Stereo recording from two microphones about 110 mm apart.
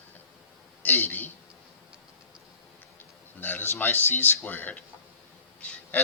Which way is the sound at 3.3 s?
15° left (ahead or behind).